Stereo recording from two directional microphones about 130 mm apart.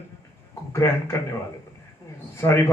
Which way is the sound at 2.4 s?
20° left (ahead or behind).